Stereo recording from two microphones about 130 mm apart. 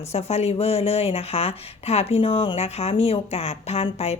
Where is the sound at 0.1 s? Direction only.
55° left (ahead or behind).